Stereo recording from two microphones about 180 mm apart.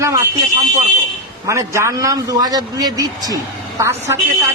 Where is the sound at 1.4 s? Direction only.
15° right (ahead or behind).